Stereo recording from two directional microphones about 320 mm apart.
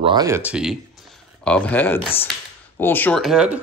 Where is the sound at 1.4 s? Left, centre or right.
Centre.